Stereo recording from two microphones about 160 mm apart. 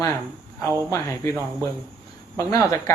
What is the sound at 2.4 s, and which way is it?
Speech, 20° left (ahead or behind).